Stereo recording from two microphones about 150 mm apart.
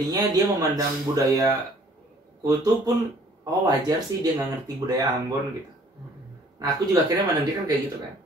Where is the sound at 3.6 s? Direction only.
25° right (ahead or behind).